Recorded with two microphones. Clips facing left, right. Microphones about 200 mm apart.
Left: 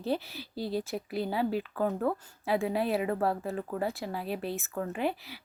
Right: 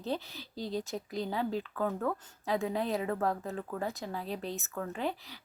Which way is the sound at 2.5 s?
10° left (ahead or behind).